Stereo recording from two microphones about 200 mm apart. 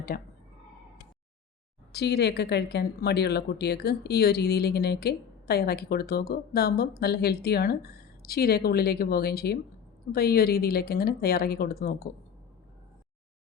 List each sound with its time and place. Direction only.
0.1 s speech: 45° left (ahead or behind)
1.9 s speech: 55° left (ahead or behind)